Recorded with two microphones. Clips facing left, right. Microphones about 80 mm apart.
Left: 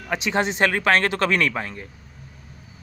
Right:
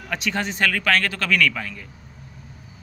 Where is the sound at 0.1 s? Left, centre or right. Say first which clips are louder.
Left 3 dB; left.